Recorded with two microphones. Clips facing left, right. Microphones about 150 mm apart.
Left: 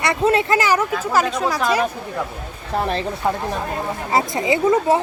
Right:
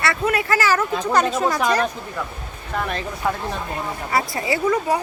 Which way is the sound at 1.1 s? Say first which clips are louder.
Right 1 dB; centre (ahead or behind).